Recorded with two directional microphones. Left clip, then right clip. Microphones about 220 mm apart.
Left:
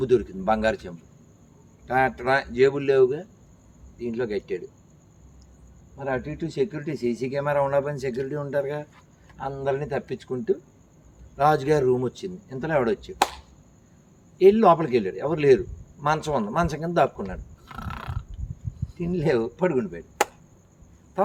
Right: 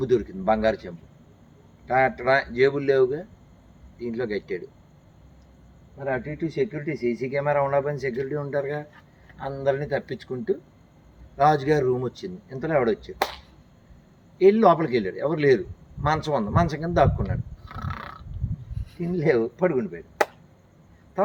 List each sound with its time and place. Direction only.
0.0 s speech: 10° right (ahead or behind)
6.2 s speech: centre (ahead or behind)
14.4 s speech: 10° right (ahead or behind)